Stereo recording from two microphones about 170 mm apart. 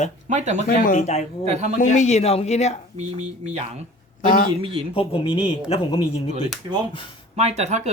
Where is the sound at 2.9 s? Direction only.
40° right (ahead or behind).